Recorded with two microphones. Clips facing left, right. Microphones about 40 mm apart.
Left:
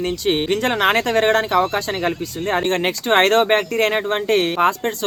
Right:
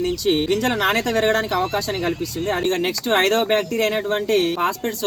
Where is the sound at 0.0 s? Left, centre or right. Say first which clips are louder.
Even; left.